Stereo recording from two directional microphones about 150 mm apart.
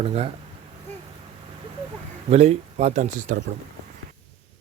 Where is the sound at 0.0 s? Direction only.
40° right (ahead or behind).